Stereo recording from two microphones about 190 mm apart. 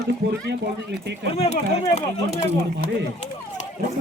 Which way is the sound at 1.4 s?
35° left (ahead or behind).